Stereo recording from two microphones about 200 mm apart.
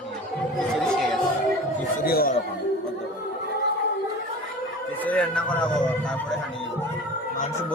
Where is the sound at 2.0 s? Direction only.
50° left (ahead or behind).